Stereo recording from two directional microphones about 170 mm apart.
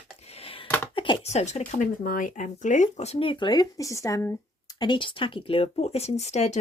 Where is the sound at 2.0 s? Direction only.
55° left (ahead or behind).